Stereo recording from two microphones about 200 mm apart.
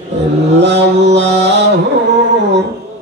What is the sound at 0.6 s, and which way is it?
Mantra, 60° right (ahead or behind).